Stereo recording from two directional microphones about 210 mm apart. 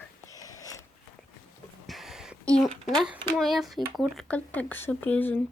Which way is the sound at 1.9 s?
Centre (ahead or behind).